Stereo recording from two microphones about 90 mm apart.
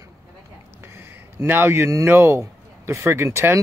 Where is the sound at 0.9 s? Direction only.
25° right (ahead or behind).